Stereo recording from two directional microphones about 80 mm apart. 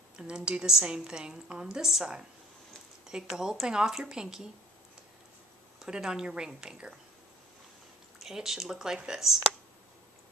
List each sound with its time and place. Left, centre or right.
0.1 s a woman's voice: centre
5.8 s a woman's voice: centre
8.2 s speech: centre